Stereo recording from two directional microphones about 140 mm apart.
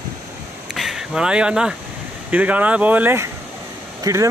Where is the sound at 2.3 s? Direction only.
10° right (ahead or behind).